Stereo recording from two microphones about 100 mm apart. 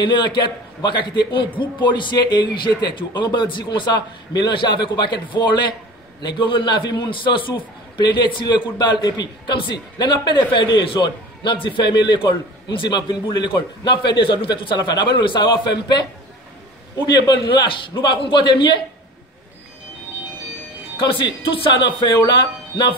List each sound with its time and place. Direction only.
0.0 s a man's voice: 50° left (ahead or behind)
17.1 s a man's voice: 50° left (ahead or behind)
21.0 s a man's voice: 55° left (ahead or behind)